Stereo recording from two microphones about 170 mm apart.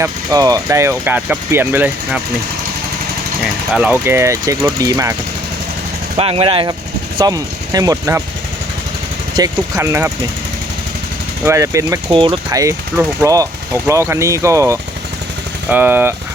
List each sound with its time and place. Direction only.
0.0 s speech: 20° right (ahead or behind)
3.8 s speech: 10° right (ahead or behind)
6.1 s speech: 35° right (ahead or behind); by 8.2 s 20° right (ahead or behind)
9.3 s speech: 20° right (ahead or behind)
11.4 s speech: 20° right (ahead or behind)
12.1 s speech: 30° right (ahead or behind); by 16.1 s 10° right (ahead or behind)